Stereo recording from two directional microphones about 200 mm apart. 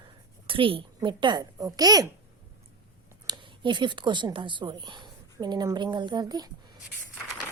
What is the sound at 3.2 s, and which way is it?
Speech, 20° right (ahead or behind).